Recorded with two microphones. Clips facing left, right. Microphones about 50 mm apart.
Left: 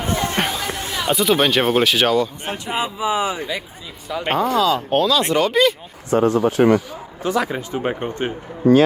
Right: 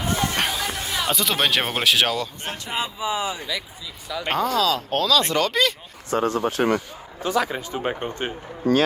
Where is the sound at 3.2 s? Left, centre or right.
Left.